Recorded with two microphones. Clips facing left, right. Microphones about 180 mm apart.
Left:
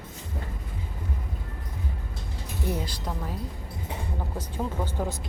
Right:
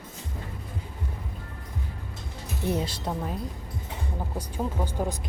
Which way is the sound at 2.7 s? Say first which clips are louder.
Right 4 dB; 20° right (ahead or behind).